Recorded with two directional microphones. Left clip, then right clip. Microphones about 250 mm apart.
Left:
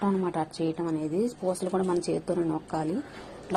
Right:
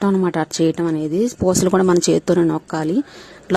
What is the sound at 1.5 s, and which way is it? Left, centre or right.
A woman's voice, right.